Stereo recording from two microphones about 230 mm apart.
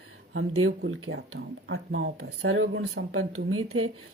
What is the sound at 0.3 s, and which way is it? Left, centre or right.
Speech, right.